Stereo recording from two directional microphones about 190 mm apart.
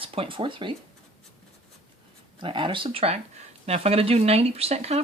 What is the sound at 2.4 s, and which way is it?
Speech, 25° right (ahead or behind).